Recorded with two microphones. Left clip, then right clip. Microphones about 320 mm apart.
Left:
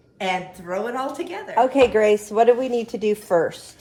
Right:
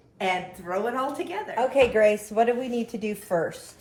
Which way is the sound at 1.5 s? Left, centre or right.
Left.